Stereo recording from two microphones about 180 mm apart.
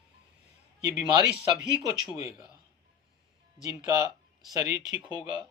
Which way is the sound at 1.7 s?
25° right (ahead or behind).